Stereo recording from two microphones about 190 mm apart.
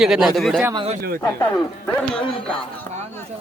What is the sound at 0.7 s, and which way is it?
Speech, 30° right (ahead or behind).